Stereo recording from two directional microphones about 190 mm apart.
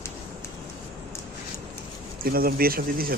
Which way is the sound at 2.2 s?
50° right (ahead or behind).